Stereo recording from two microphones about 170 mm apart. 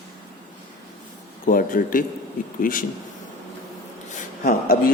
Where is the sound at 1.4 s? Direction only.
55° left (ahead or behind).